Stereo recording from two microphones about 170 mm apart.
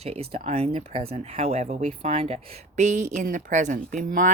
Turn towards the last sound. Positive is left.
turn(degrees=-50)  # may be behind; listen again after turning